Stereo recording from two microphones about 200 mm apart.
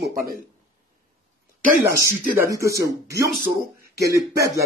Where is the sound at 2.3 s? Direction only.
15° right (ahead or behind).